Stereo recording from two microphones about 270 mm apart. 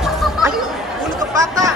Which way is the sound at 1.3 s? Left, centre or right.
Centre.